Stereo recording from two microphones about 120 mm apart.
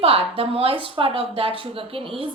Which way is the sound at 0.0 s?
50° right (ahead or behind).